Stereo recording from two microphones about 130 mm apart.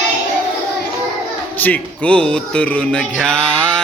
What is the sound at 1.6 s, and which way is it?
Speech, 10° left (ahead or behind).